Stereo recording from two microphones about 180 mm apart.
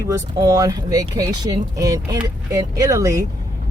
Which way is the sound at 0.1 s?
20° right (ahead or behind).